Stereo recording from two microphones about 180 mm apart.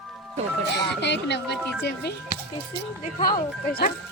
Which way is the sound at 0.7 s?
70° left (ahead or behind).